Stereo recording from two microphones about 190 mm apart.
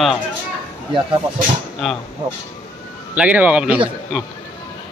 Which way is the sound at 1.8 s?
Centre (ahead or behind).